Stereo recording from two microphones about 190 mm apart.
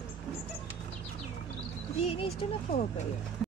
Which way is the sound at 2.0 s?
30° left (ahead or behind).